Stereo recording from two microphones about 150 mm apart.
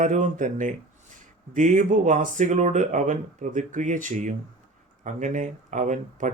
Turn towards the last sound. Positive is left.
turn(degrees=-55)  # may be behind; listen again after turning